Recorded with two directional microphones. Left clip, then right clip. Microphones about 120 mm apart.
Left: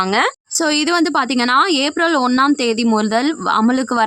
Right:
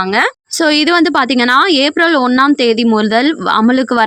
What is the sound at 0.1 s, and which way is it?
A woman's voice, 25° right (ahead or behind).